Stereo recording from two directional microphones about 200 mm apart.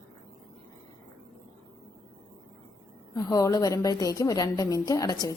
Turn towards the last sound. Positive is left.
turn(degrees=20)  # may be behind; listen again after turning